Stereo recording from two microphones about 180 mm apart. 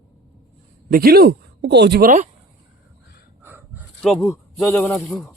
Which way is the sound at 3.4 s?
10° right (ahead or behind).